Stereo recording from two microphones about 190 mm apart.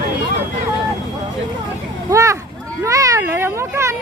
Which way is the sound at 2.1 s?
15° right (ahead or behind).